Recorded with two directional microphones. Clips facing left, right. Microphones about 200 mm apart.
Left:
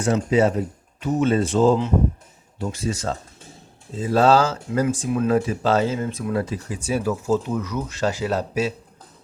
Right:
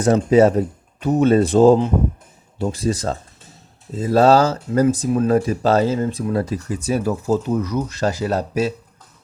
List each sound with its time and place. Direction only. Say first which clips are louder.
0.3 s speech: right 6 dB; 40° right (ahead or behind)